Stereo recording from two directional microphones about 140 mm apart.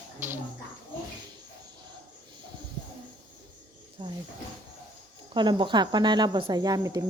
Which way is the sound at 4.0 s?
35° right (ahead or behind).